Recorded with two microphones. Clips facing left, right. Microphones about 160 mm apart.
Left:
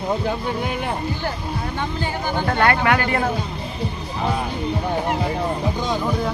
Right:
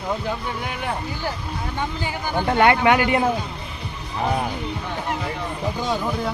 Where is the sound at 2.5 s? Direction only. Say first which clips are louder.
Right 2 dB; 20° right (ahead or behind).